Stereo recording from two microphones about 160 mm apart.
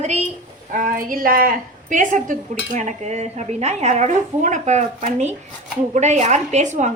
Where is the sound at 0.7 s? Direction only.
60° right (ahead or behind).